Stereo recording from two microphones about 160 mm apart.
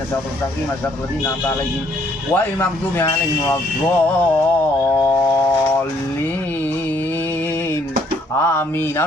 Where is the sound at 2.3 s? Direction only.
15° left (ahead or behind).